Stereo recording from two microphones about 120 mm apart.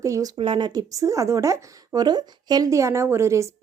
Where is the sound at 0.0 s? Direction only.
25° right (ahead or behind).